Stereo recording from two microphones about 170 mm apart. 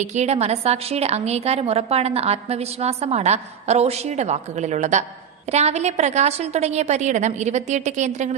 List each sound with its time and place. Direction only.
0.0 s a woman's voice: 45° right (ahead or behind)